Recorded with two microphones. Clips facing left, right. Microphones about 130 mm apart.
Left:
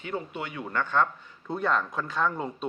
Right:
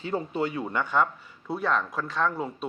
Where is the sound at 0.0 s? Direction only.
35° right (ahead or behind).